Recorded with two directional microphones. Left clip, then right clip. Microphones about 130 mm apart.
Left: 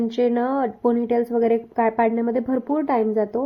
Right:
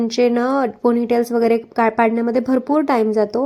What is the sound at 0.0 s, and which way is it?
A woman's voice, 30° right (ahead or behind).